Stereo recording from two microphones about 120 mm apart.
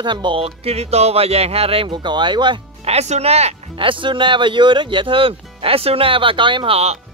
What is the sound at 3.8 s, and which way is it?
Speech, 45° right (ahead or behind).